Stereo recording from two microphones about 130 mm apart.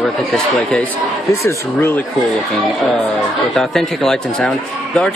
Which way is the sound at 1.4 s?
20° left (ahead or behind).